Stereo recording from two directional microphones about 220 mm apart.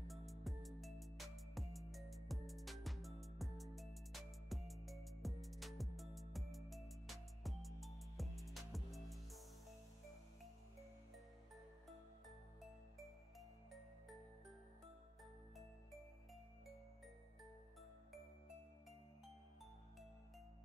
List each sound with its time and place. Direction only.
0.1 s music: centre (ahead or behind)